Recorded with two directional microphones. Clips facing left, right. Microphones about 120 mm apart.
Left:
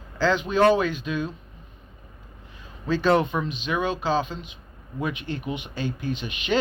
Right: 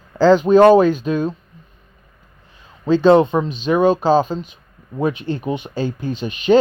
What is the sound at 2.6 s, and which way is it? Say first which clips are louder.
Speech: right 10 dB; 30° right (ahead or behind).